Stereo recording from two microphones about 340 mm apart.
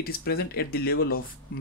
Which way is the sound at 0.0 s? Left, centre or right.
Left.